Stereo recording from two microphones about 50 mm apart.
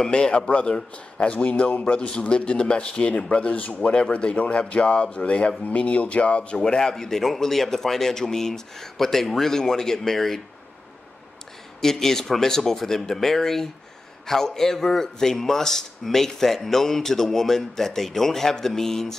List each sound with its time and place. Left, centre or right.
0.0 s a man's voice: centre
11.8 s speech: centre